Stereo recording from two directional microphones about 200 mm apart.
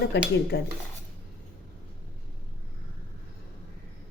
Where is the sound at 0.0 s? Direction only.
55° left (ahead or behind).